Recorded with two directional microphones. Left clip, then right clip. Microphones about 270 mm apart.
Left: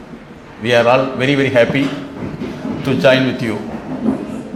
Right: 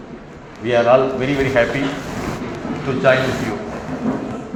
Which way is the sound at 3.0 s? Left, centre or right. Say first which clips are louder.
Left 3 dB; left.